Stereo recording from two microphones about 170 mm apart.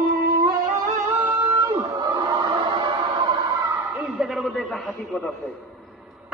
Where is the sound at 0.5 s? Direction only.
45° right (ahead or behind).